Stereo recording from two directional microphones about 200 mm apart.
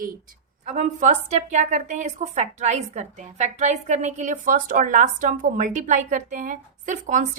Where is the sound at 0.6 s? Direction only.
35° right (ahead or behind).